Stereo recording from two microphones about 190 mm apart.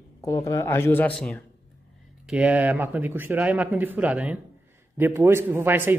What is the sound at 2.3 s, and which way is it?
Speech, 5° right (ahead or behind).